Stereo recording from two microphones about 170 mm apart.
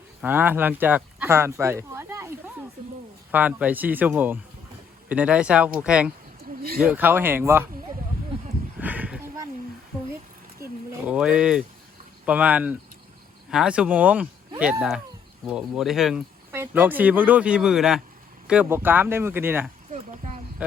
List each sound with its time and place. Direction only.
0.2 s speech: 10° right (ahead or behind)
3.3 s speech: 10° right (ahead or behind)
6.6 s speech: 60° right (ahead or behind)
6.8 s speech: 10° right (ahead or behind)
8.8 s a sound: 10° right (ahead or behind)
11.1 s speech: 5° right (ahead or behind)
16.5 s speech: 15° right (ahead or behind)
19.9 s a sound: 40° right (ahead or behind)
20.6 s speech: 10° right (ahead or behind)